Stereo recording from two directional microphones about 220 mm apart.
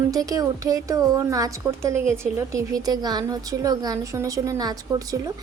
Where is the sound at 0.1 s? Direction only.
15° right (ahead or behind).